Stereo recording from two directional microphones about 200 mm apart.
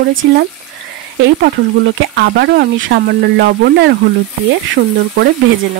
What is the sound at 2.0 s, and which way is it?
Speech, 55° right (ahead or behind).